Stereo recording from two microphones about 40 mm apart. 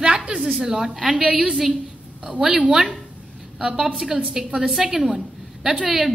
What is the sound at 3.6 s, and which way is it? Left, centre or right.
A woman's voice, centre.